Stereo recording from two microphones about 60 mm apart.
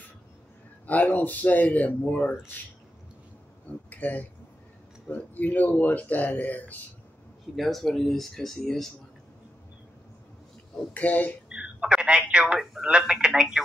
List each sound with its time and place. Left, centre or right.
0.8 s speech: left
3.9 s speech: left
7.5 s speech: centre
10.9 s speech: left
11.4 s telephone: centre
12.5 s speech: centre